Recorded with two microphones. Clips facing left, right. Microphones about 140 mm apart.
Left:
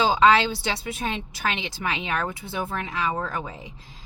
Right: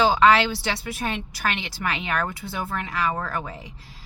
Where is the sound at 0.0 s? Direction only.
20° left (ahead or behind).